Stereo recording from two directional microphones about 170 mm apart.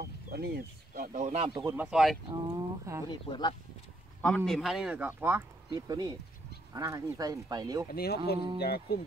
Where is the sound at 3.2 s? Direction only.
25° left (ahead or behind).